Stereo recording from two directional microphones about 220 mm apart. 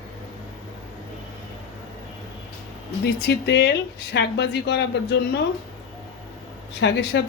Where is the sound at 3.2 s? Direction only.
50° left (ahead or behind).